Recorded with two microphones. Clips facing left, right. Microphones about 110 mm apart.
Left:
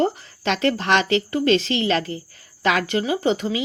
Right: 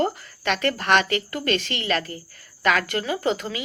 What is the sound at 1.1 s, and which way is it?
Speech, 30° left (ahead or behind).